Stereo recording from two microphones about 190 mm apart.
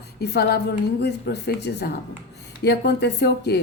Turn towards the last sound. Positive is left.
turn(degrees=60)  # may be behind; listen again after turning